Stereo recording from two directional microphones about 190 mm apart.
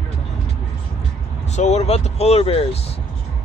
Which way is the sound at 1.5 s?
35° left (ahead or behind).